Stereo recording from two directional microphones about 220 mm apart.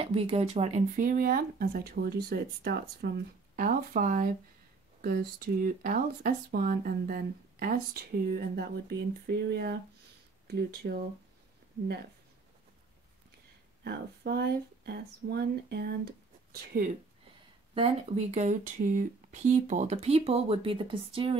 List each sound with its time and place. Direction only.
0.0 s speech: 25° right (ahead or behind); by 11.1 s 45° right (ahead or behind)
13.8 s speech: 50° right (ahead or behind)
17.7 s speech: 30° right (ahead or behind)